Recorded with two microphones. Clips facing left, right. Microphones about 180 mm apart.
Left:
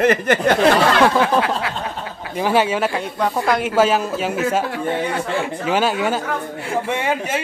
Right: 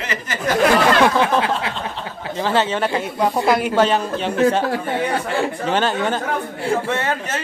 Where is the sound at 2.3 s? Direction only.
10° left (ahead or behind).